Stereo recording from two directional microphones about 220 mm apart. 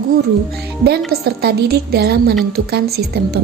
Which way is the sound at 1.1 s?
45° right (ahead or behind).